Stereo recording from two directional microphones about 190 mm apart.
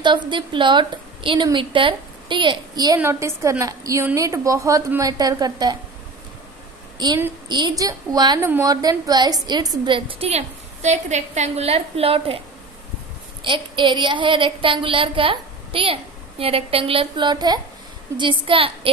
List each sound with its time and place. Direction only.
0.0 s a woman's voice: 25° right (ahead or behind)
7.0 s a woman's voice: 20° right (ahead or behind)
13.4 s a woman's voice: 25° right (ahead or behind)